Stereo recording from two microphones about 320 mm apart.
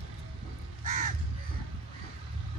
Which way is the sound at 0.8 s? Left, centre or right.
Right.